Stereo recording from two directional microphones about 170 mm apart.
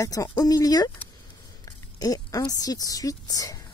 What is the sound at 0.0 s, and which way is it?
Speech, 20° left (ahead or behind).